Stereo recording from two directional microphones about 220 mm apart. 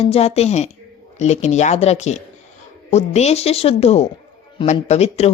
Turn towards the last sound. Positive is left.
turn(degrees=30)  # may be behind; listen again after turning